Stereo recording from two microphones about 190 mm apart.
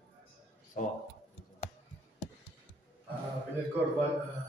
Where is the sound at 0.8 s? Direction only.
45° left (ahead or behind).